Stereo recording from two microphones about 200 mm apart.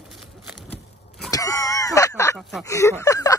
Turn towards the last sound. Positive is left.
turn(degrees=15)  # may be behind; listen again after turning